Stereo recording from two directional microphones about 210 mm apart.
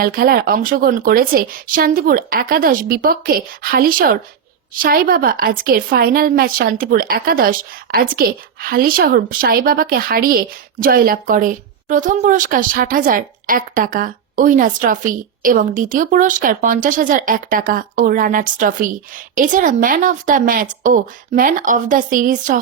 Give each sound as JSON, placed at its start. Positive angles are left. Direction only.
{"t": 0.0, "sound": "a woman's voice", "side_deg": -45}